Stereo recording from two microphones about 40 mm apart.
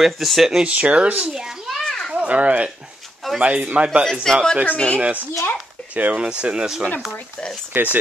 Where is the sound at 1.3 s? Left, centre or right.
Centre.